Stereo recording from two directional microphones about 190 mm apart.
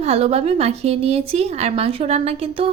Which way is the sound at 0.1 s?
35° right (ahead or behind).